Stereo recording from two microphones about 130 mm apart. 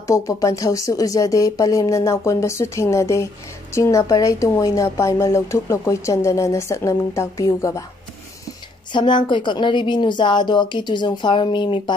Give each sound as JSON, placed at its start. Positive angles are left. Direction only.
{"t": 0.0, "sound": "speech", "side_deg": 25}
{"t": 8.9, "sound": "a woman's voice", "side_deg": 35}